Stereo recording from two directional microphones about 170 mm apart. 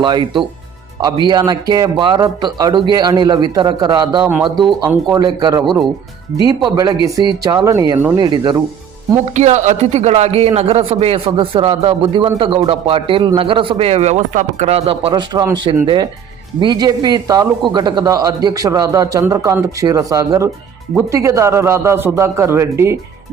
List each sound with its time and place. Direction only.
0.0 s speech: 25° right (ahead or behind)
4.2 s a man's voice: 10° right (ahead or behind)
5.0 s speech: 25° right (ahead or behind)
9.3 s a man's voice: 45° right (ahead or behind); by 23.0 s 15° right (ahead or behind)